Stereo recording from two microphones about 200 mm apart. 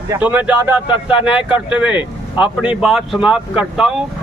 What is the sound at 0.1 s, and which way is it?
A man's voice, 5° right (ahead or behind).